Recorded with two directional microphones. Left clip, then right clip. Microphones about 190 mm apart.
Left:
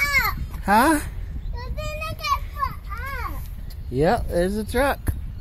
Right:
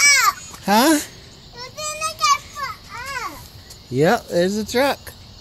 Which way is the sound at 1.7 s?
10° right (ahead or behind).